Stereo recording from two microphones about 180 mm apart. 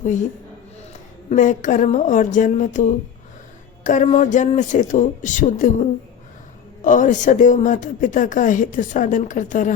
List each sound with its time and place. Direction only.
0.0 s speech: 45° left (ahead or behind)
1.3 s a woman's voice: 45° left (ahead or behind)
6.8 s a woman's voice: 45° left (ahead or behind)